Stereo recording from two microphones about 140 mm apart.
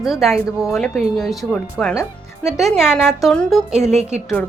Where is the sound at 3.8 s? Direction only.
55° right (ahead or behind).